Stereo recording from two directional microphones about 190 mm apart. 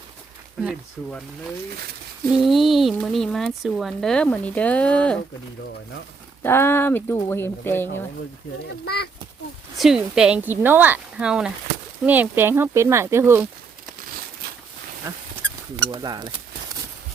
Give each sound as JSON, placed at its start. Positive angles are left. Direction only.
{"t": 0.6, "sound": "speech", "side_deg": 0}
{"t": 2.3, "sound": "speech", "side_deg": 0}
{"t": 6.4, "sound": "speech", "side_deg": 10}
{"t": 8.8, "sound": "speech", "side_deg": 55}
{"t": 9.7, "sound": "speech", "side_deg": 0}
{"t": 15.9, "sound": "speech", "side_deg": -20}